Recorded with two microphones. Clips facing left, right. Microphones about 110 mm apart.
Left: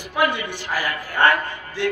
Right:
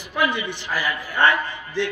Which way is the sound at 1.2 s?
50° left (ahead or behind).